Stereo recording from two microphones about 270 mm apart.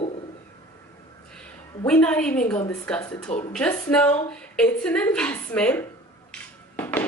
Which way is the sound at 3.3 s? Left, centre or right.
Left.